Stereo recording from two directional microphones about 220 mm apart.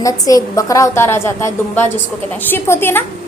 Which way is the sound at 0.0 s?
15° left (ahead or behind).